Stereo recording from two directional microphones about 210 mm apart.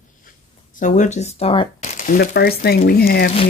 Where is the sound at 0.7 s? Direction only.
35° left (ahead or behind).